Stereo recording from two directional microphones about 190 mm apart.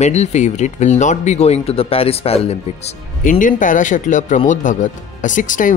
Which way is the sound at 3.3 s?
45° left (ahead or behind).